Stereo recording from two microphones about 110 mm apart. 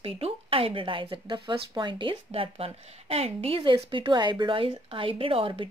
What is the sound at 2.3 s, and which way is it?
Speech, 60° right (ahead or behind).